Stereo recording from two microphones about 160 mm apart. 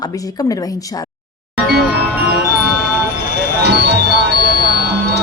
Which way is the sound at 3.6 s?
90° right.